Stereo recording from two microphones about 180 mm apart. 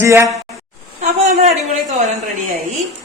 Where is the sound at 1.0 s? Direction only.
35° right (ahead or behind).